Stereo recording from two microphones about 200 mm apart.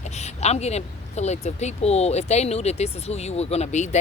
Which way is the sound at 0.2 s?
35° left (ahead or behind).